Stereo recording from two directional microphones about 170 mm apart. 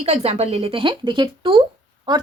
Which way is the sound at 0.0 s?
35° right (ahead or behind).